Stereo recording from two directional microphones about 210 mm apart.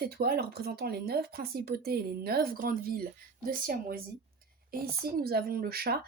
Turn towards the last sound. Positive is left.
turn(degrees=-45)  # may be behind; listen again after turning